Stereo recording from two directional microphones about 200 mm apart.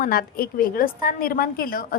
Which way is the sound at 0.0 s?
45° left (ahead or behind).